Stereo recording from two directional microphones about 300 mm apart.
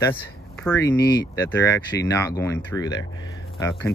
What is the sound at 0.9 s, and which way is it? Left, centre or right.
Speech, left.